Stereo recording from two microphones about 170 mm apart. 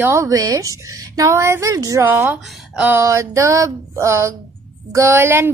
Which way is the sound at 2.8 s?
15° right (ahead or behind).